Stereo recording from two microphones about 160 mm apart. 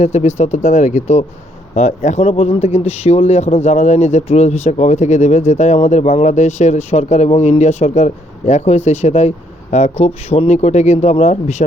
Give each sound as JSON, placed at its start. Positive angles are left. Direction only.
{"t": 0.0, "sound": "speech", "side_deg": 45}